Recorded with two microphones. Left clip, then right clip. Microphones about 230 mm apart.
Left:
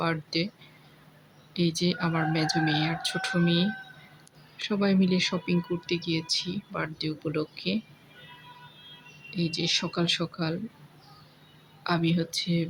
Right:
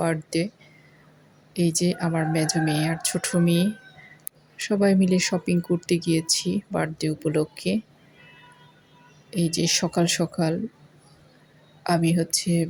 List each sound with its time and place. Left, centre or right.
0.0 s speech: centre
1.5 s speech: centre
9.3 s speech: centre
11.8 s speech: centre